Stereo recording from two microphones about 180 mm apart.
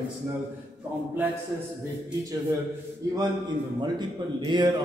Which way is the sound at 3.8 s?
25° right (ahead or behind).